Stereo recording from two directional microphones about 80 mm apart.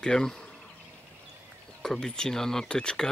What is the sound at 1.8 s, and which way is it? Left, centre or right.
Speech, centre.